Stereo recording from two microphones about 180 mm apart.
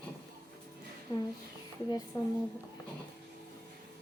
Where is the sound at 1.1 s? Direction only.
15° left (ahead or behind).